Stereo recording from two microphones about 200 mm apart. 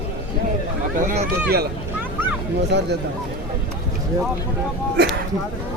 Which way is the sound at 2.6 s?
60° right (ahead or behind).